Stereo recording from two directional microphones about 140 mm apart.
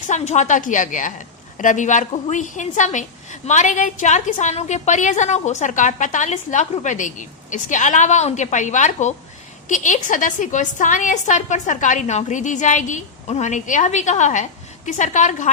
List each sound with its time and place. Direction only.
0.1 s a woman's voice: 60° left (ahead or behind)